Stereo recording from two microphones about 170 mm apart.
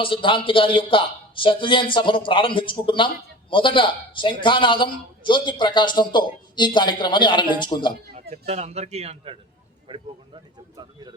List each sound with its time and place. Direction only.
0.0 s a man's voice: 30° left (ahead or behind)
8.1 s speech: 40° right (ahead or behind)
10.8 s speech: 25° right (ahead or behind)